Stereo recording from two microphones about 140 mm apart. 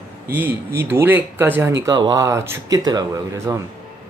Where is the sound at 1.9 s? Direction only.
30° right (ahead or behind).